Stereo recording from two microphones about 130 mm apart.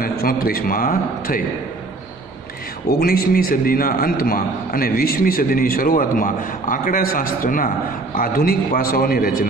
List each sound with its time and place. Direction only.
0.0 s a man's voice: 90° left
3.0 s a man's voice: 90° left